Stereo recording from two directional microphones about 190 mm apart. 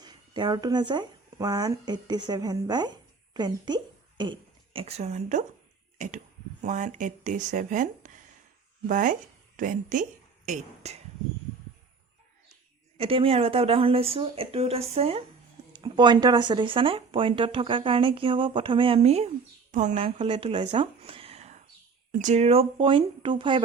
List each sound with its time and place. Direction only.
0.0 s a woman's voice: 20° right (ahead or behind); by 10.9 s 40° right (ahead or behind)
13.0 s speech: 30° right (ahead or behind)